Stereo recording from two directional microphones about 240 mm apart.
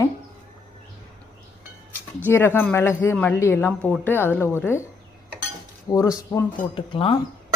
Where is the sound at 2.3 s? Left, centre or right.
Centre.